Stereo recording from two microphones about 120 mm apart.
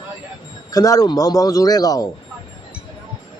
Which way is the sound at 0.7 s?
30° left (ahead or behind).